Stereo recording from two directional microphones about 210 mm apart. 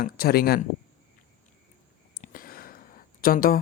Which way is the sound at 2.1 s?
40° left (ahead or behind).